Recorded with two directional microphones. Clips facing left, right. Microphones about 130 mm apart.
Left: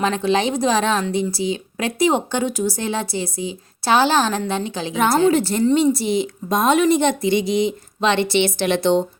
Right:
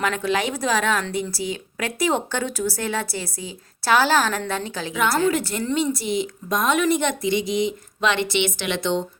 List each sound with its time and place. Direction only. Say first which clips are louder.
0.0 s speech: left 4 dB; 25° left (ahead or behind)